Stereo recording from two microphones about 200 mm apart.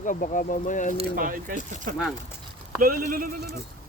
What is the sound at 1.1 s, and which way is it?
Speech, 45° right (ahead or behind).